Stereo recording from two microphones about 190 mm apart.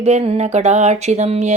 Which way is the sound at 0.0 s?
35° right (ahead or behind).